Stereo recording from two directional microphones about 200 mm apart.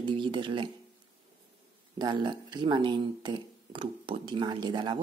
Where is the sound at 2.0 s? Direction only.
20° right (ahead or behind).